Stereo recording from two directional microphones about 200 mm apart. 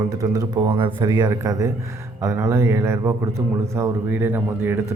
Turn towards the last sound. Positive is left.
turn(degrees=-10)  # may be behind; listen again after turning